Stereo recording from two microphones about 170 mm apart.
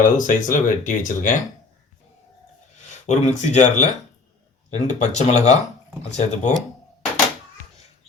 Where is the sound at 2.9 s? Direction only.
45° left (ahead or behind).